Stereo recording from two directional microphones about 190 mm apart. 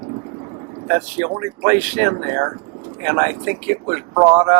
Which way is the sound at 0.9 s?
20° right (ahead or behind).